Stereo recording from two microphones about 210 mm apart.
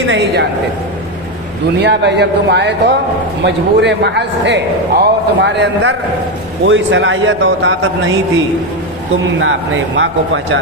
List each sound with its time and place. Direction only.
0.1 s a man's voice: 50° right (ahead or behind)
1.8 s a man's voice: 55° right (ahead or behind)
9.4 s a man's voice: 65° right (ahead or behind)